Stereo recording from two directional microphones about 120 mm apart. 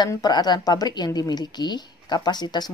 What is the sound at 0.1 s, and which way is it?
Speech, 35° left (ahead or behind).